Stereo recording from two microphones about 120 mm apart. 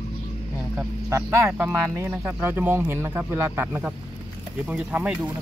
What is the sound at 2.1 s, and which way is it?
Speech, 5° right (ahead or behind).